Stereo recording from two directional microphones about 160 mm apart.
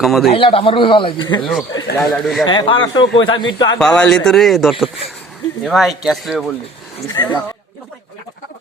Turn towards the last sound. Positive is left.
turn(degrees=25)  # may be behind; listen again after turning